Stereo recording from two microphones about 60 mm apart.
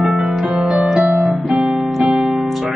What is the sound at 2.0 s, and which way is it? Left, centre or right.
Piano, centre.